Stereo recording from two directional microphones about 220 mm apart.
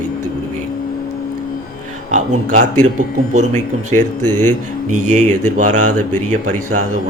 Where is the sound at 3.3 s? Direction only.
35° right (ahead or behind).